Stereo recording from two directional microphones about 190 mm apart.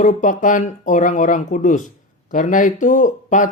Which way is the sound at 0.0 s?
45° left (ahead or behind).